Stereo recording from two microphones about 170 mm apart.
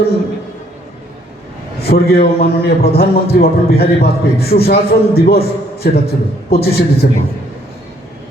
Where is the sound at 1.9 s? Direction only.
65° left (ahead or behind).